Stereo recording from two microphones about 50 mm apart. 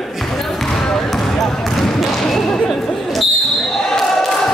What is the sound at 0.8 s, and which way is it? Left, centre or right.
Basketball bounce, centre.